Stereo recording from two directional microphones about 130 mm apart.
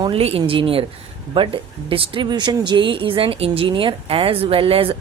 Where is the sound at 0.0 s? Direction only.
50° right (ahead or behind).